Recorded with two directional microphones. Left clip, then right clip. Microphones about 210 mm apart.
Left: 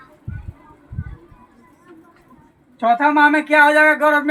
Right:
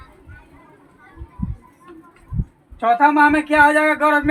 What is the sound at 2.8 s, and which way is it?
Speech, 40° left (ahead or behind).